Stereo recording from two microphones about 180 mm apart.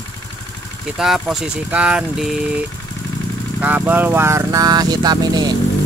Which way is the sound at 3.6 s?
10° right (ahead or behind).